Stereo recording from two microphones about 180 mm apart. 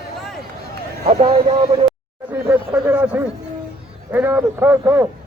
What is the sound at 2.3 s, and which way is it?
A man's voice, 15° right (ahead or behind).